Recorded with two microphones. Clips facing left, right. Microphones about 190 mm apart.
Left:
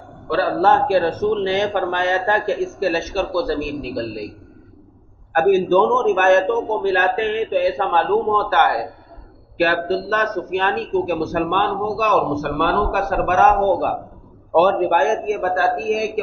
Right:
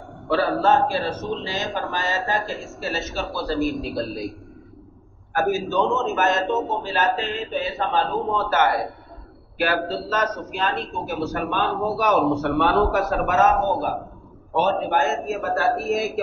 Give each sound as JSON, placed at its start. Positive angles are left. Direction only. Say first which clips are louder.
{"t": 0.3, "sound": "speech", "louder": "left 2 dB", "side_deg": 65}
{"t": 5.3, "sound": "a man's voice", "louder": "left 8 dB", "side_deg": 65}